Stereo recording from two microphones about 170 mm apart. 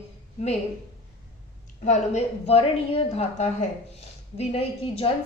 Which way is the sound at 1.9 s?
40° left (ahead or behind).